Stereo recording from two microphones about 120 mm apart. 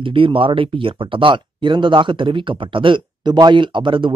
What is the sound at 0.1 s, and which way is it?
Speech, 45° right (ahead or behind).